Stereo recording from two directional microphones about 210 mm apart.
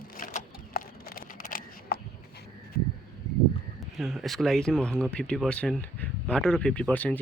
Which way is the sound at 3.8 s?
Centre (ahead or behind).